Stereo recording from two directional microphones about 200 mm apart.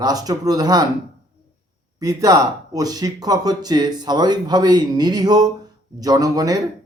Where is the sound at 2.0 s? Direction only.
20° right (ahead or behind).